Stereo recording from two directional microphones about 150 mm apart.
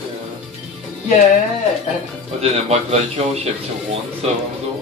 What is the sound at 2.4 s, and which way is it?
Speech, 45° right (ahead or behind).